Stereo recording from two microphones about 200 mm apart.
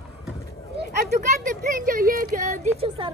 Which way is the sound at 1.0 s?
40° right (ahead or behind).